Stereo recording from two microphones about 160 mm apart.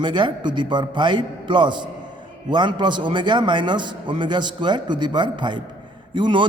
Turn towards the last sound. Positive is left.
turn(degrees=-30)  # may be behind; listen again after turning